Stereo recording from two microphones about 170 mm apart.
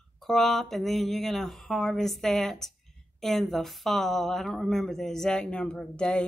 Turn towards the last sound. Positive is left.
turn(degrees=5)  # may be behind; listen again after turning